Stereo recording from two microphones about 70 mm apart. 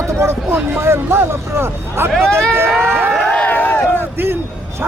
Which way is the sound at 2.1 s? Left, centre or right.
Centre.